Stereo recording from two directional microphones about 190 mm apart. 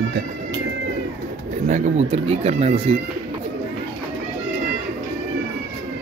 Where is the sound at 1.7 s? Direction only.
40° right (ahead or behind).